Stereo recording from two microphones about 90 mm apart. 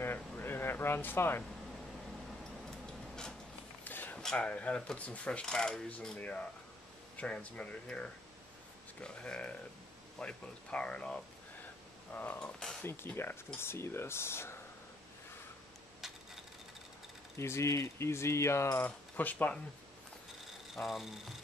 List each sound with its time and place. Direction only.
0.0 s air conditioning: 25° left (ahead or behind)
3.8 s a sound: 20° left (ahead or behind)
4.2 s speech: 10° left (ahead or behind); by 14.6 s 30° left (ahead or behind)
17.4 s speech: 30° left (ahead or behind)
18.9 s speech: 20° left (ahead or behind)
20.7 s speech: centre (ahead or behind)